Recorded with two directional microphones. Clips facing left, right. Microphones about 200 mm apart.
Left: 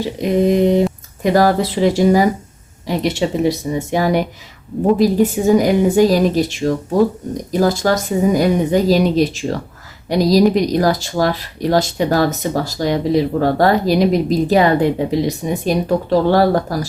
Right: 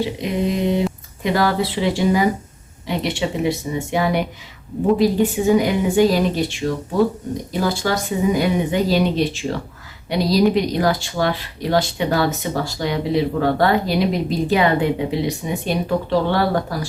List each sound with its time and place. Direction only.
0.2 s speech: 45° left (ahead or behind)